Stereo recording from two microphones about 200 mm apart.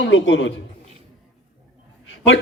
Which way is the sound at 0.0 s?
70° left (ahead or behind).